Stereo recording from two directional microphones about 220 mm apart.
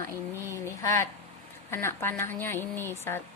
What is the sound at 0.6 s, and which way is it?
Speech, 10° left (ahead or behind).